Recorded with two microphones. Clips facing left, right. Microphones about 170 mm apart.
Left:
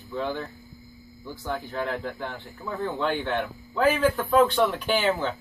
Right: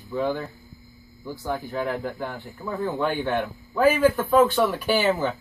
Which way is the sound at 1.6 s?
Centre (ahead or behind).